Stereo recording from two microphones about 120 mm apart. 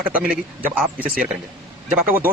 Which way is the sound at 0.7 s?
5° right (ahead or behind).